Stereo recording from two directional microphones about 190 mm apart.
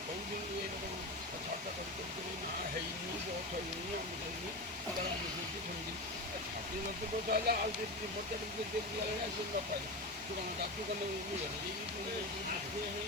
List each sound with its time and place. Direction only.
7.3 s speech: 55° right (ahead or behind)